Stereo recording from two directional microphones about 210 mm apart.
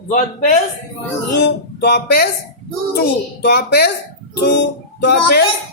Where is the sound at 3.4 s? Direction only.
50° left (ahead or behind).